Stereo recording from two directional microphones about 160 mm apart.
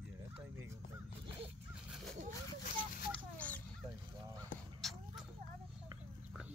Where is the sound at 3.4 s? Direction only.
10° left (ahead or behind).